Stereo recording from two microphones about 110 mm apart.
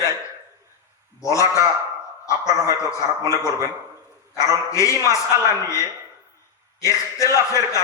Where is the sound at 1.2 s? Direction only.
30° left (ahead or behind).